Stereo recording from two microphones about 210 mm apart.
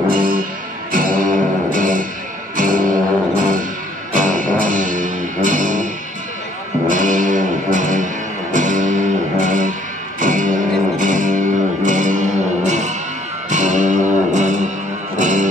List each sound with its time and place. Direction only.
0.1 s music: 40° right (ahead or behind)
4.1 s music: 40° right (ahead or behind)
6.9 s music: 40° right (ahead or behind)